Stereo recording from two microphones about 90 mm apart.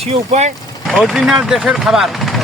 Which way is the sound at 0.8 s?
5° right (ahead or behind).